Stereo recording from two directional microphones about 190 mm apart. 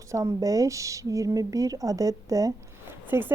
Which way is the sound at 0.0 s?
15° right (ahead or behind).